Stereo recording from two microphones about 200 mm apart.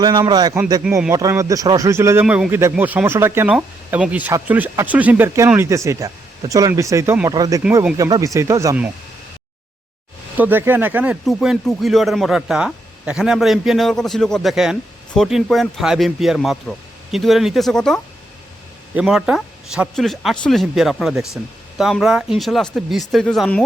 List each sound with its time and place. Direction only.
0.0 s speech: 20° right (ahead or behind)
7.6 s speech: 10° right (ahead or behind)
10.3 s speech: 10° right (ahead or behind)